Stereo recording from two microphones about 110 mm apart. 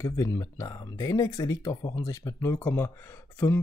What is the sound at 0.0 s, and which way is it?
Speech, 30° left (ahead or behind).